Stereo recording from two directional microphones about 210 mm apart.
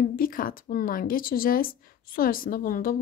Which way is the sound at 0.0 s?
40° left (ahead or behind).